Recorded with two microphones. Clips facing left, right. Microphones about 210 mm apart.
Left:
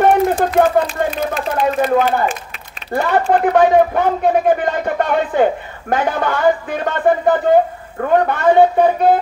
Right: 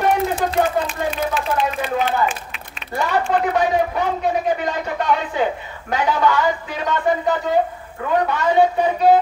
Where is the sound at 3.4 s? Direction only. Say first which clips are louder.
Left 7 dB; 55° left (ahead or behind).